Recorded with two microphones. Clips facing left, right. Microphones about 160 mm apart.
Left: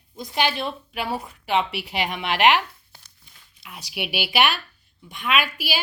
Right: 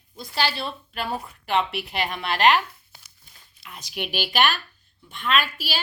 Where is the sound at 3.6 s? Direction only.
10° left (ahead or behind).